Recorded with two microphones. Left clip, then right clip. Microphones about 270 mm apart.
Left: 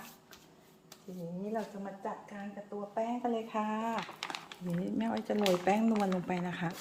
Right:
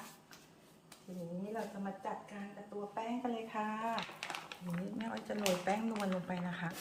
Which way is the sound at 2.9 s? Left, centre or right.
Left.